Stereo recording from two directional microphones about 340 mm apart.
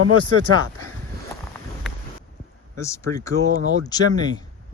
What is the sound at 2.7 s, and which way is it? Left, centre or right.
Speech, centre.